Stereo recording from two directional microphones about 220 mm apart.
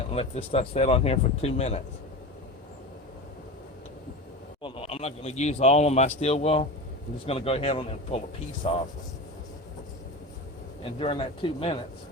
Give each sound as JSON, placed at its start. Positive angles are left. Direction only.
{"t": 0.1, "sound": "speech", "side_deg": 25}
{"t": 4.6, "sound": "speech", "side_deg": 25}
{"t": 10.9, "sound": "speech", "side_deg": 25}